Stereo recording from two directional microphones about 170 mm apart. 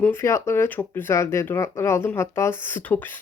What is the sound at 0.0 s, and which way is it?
Speech, 15° left (ahead or behind).